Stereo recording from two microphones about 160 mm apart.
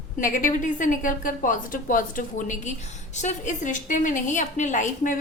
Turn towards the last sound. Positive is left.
turn(degrees=50)  # may be behind; listen again after turning